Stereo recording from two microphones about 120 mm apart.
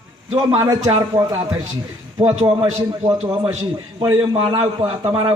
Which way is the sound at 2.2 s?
50° right (ahead or behind).